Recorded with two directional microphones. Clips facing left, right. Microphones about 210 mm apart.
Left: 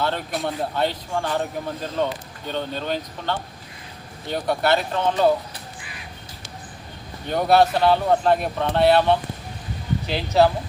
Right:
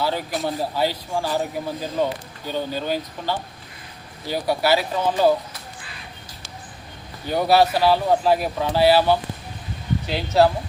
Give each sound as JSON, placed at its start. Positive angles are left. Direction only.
{"t": 0.0, "sound": "a man's voice", "side_deg": -5}
{"t": 7.3, "sound": "a man's voice", "side_deg": -5}